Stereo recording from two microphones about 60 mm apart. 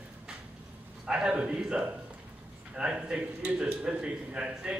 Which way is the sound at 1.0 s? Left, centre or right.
Centre.